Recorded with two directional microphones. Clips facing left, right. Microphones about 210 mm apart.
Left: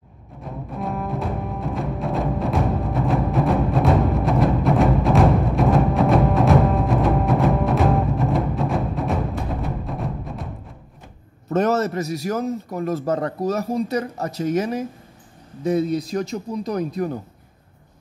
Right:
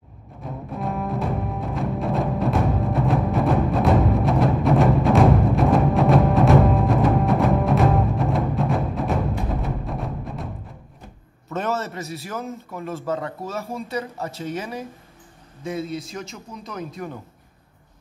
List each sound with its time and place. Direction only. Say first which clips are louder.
0.7 s music: even; centre (ahead or behind)
11.5 s a man's voice: left 7 dB; 40° left (ahead or behind)